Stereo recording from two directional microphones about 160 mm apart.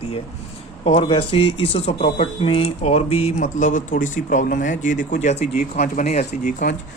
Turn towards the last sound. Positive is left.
turn(degrees=55)  # may be behind; listen again after turning